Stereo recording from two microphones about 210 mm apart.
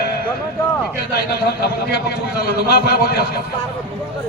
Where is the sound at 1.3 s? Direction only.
50° left (ahead or behind).